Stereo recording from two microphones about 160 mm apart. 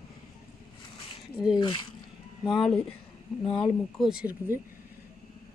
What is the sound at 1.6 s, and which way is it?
Speech, 30° left (ahead or behind).